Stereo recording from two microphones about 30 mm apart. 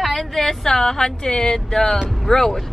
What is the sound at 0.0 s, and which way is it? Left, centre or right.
A woman's voice, centre.